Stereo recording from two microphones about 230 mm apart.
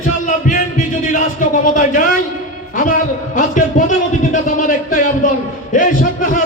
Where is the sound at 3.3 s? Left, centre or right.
Left.